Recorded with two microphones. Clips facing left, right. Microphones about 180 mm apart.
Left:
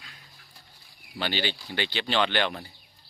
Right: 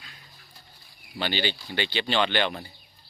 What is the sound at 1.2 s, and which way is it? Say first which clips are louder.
Speech: right 1 dB; centre (ahead or behind).